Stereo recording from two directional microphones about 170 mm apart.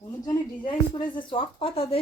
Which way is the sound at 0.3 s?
30° left (ahead or behind).